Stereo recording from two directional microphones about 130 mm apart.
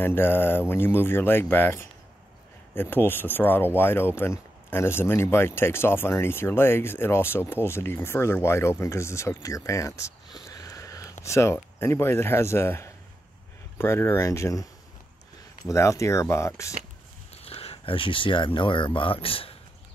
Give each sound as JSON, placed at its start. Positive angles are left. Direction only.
{"t": 0.0, "sound": "speech", "side_deg": 15}
{"t": 17.4, "sound": "speech", "side_deg": 50}